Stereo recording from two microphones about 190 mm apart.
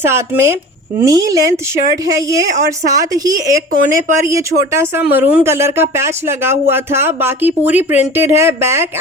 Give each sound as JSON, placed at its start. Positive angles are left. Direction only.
{"t": 0.0, "sound": "speech", "side_deg": -15}